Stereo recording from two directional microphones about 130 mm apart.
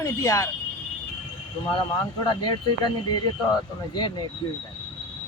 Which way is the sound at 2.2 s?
35° left (ahead or behind).